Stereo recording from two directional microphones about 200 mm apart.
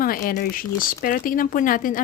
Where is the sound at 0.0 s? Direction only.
45° left (ahead or behind).